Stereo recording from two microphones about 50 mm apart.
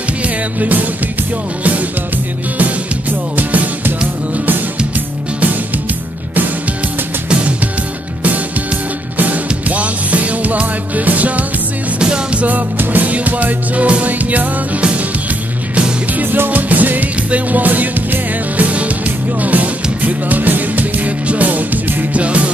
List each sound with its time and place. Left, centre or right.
0.2 s music: right
9.2 s music: right
12.0 s music: right
12.4 s music: right
16.2 s music: right